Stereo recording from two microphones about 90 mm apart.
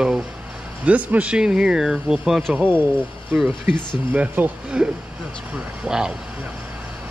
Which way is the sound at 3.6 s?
20° right (ahead or behind).